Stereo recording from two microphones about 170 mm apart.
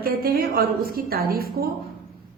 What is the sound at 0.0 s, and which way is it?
A woman's voice, 60° right (ahead or behind).